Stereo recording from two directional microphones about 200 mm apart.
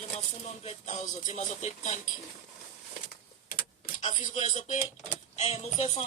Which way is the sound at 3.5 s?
40° left (ahead or behind).